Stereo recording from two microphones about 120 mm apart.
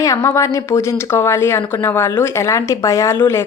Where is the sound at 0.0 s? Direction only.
25° left (ahead or behind).